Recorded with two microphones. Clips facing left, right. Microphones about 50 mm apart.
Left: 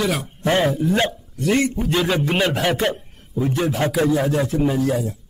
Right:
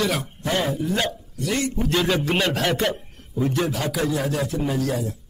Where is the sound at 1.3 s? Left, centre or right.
Left.